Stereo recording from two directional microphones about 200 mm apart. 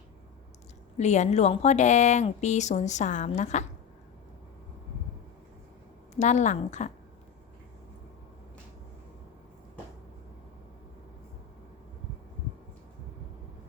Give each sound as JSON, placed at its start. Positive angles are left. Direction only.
{"t": 0.9, "sound": "a woman's voice", "side_deg": 35}
{"t": 6.1, "sound": "a woman's voice", "side_deg": 35}